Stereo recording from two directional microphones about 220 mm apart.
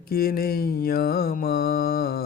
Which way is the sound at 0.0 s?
40° left (ahead or behind).